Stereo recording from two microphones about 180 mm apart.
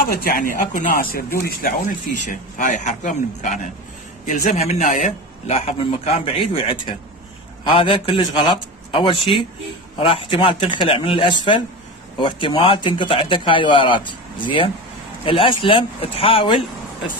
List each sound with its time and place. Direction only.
0.0 s speech: 55° left (ahead or behind)
2.5 s a man's voice: 45° left (ahead or behind); by 16.6 s 30° left (ahead or behind)